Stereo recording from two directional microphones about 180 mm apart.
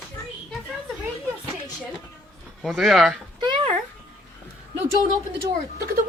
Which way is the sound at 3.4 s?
25° right (ahead or behind).